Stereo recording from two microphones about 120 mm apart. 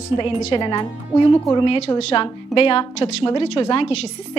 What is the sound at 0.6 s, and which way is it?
A woman's voice, 35° left (ahead or behind).